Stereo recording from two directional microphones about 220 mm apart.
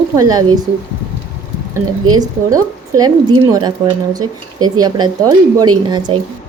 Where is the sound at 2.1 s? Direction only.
15° right (ahead or behind).